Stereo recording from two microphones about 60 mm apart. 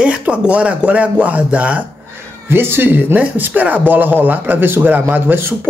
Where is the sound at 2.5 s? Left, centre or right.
Right.